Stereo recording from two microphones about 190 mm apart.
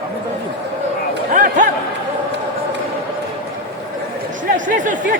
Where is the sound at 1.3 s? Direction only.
45° right (ahead or behind).